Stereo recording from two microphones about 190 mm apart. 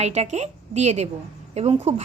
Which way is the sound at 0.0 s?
35° right (ahead or behind).